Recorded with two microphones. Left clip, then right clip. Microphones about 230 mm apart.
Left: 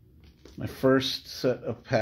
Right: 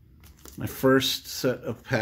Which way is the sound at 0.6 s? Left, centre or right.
Centre.